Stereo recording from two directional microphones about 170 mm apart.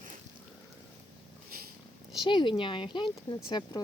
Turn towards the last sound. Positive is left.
turn(degrees=25)  # may be behind; listen again after turning